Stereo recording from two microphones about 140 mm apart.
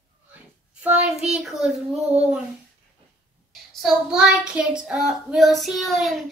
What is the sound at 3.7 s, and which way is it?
Child singing, centre (ahead or behind).